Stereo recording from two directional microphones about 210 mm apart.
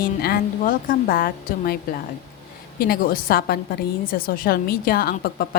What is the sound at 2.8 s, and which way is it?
A woman's voice, 45° left (ahead or behind).